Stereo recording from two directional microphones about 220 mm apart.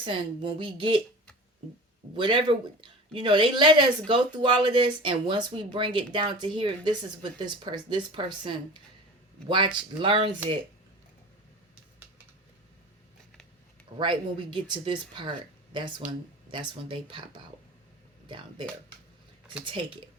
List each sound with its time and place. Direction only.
0.0 s speech: 20° right (ahead or behind)
2.1 s speech: 20° right (ahead or behind)
14.0 s speech: 20° right (ahead or behind)
19.6 s speech: 25° right (ahead or behind)